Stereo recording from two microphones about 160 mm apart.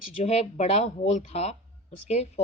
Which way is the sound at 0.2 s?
40° left (ahead or behind).